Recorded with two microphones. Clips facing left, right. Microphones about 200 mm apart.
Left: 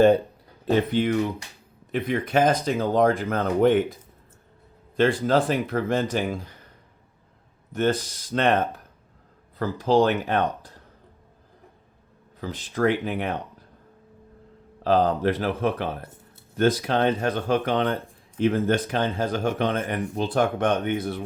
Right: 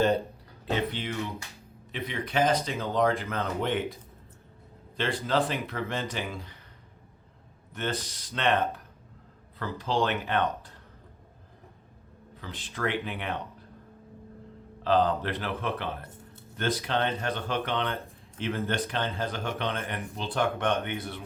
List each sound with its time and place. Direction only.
0.7 s speech: 45° left (ahead or behind)
4.9 s speech: 50° left (ahead or behind)
7.7 s speech: 45° left (ahead or behind)
12.4 s speech: 45° left (ahead or behind)
14.8 s speech: 45° left (ahead or behind)